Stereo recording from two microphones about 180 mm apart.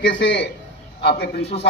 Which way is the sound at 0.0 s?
80° left.